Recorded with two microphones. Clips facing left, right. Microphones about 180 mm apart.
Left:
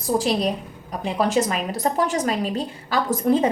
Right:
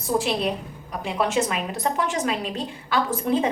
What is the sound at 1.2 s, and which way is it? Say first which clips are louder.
A woman's voice: left 2 dB; 40° left (ahead or behind).